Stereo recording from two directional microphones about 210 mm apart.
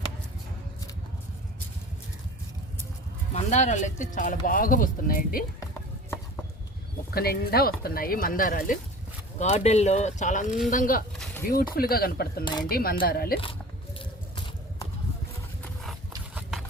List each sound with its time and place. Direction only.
3.3 s speech: 35° left (ahead or behind)
7.1 s speech: 45° left (ahead or behind)
14.0 s biting: 25° left (ahead or behind)
16.3 s horse: centre (ahead or behind)